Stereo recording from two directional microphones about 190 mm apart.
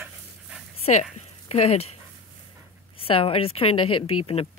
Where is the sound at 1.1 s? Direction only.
35° left (ahead or behind).